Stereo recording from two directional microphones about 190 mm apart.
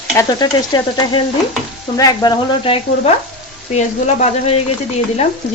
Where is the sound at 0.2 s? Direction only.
20° left (ahead or behind).